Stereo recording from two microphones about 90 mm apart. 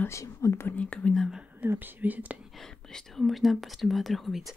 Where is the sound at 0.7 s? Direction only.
15° left (ahead or behind).